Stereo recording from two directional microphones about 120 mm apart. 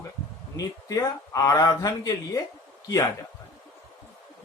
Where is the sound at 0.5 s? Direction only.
30° left (ahead or behind).